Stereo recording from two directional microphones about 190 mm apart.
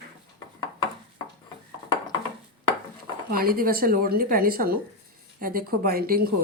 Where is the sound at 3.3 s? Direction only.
50° right (ahead or behind).